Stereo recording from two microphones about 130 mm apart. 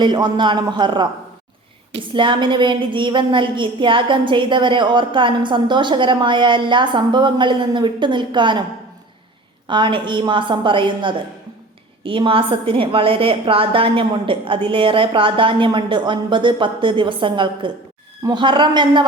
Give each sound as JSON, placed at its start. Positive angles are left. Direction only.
{"t": 0.0, "sound": "a woman's voice", "side_deg": -35}
{"t": 9.6, "sound": "a woman's voice", "side_deg": -40}